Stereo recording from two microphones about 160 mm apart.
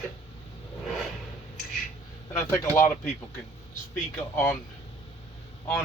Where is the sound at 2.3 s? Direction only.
15° left (ahead or behind).